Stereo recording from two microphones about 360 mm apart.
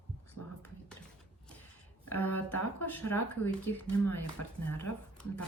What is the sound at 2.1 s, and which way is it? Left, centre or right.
Speech, centre.